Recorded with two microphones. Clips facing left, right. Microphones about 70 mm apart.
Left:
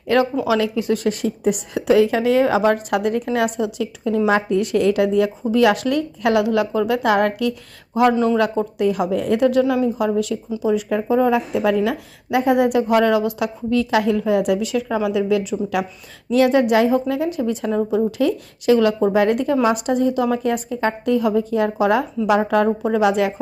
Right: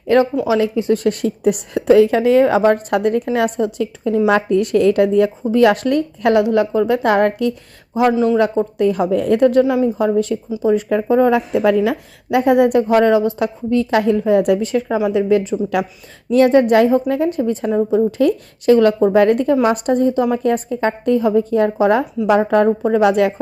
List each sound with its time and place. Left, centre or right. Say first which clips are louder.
0.4 s speech: right 3 dB; right
1.0 s a woman's voice: right 3 dB; right
4.3 s a woman's voice: right 3 dB; right
8.1 s speech: right 3 dB; centre
8.4 s speech: right 3 dB; right
8.8 s a woman's voice: right 3 dB; right
11.8 s speech: right 3 dB; right
12.9 s a woman's voice: right 3 dB; right
23.0 s speech: right 3 dB; right